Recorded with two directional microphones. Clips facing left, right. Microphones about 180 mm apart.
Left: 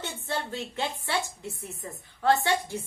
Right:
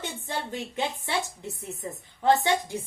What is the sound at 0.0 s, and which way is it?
A woman's voice, 15° right (ahead or behind).